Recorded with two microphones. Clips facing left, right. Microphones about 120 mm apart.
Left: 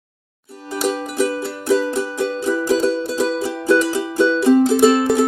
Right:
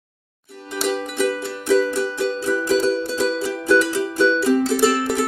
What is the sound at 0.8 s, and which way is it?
Music, 35° left (ahead or behind).